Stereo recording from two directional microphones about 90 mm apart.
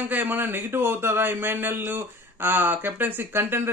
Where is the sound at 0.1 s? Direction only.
20° right (ahead or behind).